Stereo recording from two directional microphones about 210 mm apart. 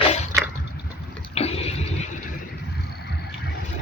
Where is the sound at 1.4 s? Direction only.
30° left (ahead or behind).